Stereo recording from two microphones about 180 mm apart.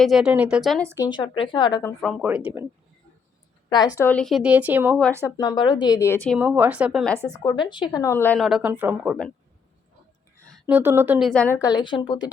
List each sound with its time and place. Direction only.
0.0 s speech: centre (ahead or behind)
1.1 s speech: 25° left (ahead or behind)
2.0 s speech: centre (ahead or behind)
3.7 s speech: 20° left (ahead or behind); by 4.9 s 10° right (ahead or behind)
5.2 s speech: 20° left (ahead or behind)
6.3 s speech: 10° right (ahead or behind)
7.4 s speech: 25° left (ahead or behind)
8.4 s speech: centre (ahead or behind)
10.3 s a sound: 5° left (ahead or behind)
10.7 s speech: 10° right (ahead or behind)
11.3 s speech: 10° left (ahead or behind); by 12.3 s 25° left (ahead or behind)